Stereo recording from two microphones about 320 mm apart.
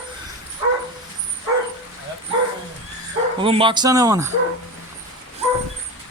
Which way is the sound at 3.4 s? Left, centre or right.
Centre.